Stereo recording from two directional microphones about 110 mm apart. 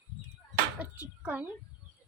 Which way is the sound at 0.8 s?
15° right (ahead or behind).